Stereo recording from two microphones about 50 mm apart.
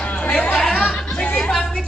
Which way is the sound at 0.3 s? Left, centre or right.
Left.